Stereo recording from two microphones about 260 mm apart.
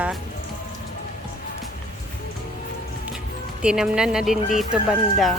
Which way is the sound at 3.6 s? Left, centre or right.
Centre.